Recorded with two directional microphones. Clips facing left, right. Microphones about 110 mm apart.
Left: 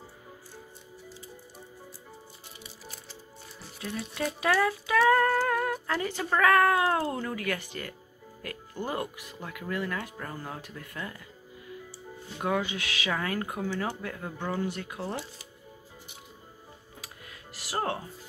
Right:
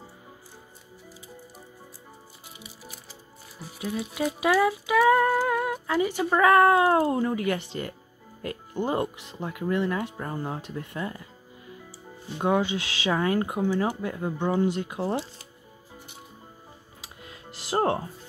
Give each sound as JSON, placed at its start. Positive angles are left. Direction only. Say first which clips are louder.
{"t": 2.6, "sound": "speech", "louder": "right 1 dB", "side_deg": -5}
{"t": 12.4, "sound": "speech", "louder": "right 5 dB", "side_deg": -25}
{"t": 17.0, "sound": "music", "louder": "right 5 dB", "side_deg": -25}